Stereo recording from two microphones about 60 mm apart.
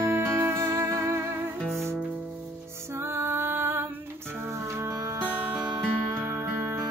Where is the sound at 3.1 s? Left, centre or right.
Right.